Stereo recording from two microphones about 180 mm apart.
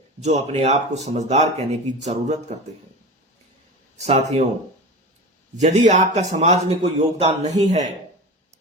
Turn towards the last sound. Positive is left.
turn(degrees=-40)  # may be behind; listen again after turning